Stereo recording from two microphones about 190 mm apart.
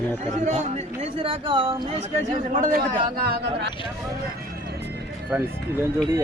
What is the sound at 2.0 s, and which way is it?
A man's voice, 40° right (ahead or behind).